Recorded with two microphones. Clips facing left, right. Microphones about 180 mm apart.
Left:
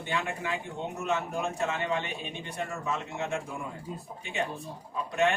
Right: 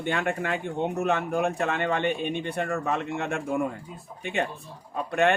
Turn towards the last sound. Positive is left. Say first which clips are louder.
# right 4 dB
turn(degrees=-60)  # may be behind; listen again after turning